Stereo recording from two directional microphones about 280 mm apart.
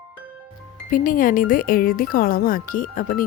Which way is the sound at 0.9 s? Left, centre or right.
Left.